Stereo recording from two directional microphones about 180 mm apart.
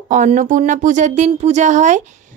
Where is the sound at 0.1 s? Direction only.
45° right (ahead or behind).